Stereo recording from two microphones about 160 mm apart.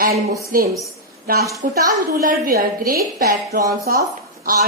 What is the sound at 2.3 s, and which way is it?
Speech, 60° right (ahead or behind).